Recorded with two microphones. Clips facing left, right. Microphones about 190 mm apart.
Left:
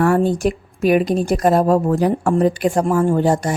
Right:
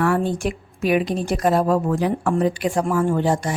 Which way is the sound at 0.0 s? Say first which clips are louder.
Left 5 dB; 40° left (ahead or behind).